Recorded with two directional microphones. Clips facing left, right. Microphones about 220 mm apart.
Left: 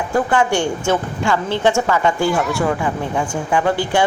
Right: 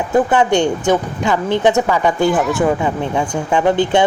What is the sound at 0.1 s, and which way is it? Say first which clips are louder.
Speech: right 4 dB; 20° right (ahead or behind).